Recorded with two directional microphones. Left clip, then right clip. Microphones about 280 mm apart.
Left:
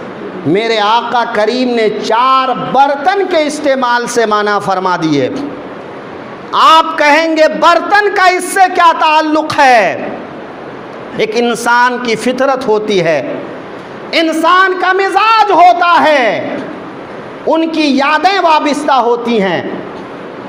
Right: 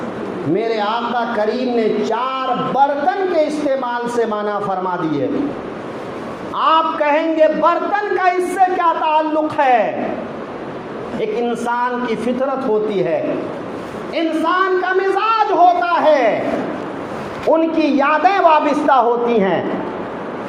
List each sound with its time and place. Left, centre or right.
0.5 s speech: left
6.5 s speech: left
11.2 s speech: left
17.5 s speech: left